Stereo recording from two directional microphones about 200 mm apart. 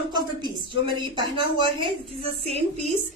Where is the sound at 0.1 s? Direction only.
20° right (ahead or behind).